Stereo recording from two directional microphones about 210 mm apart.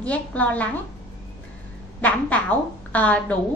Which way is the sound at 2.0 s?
5° left (ahead or behind).